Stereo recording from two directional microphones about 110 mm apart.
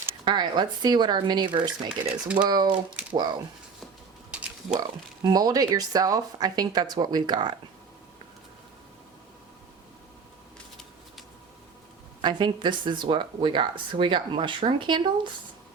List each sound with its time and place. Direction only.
0.3 s speech: 45° right (ahead or behind)
2.2 s speech: 10° right (ahead or behind)
2.5 s speech: 40° right (ahead or behind)
5.2 s speech: 35° right (ahead or behind)
12.2 s speech: 45° right (ahead or behind)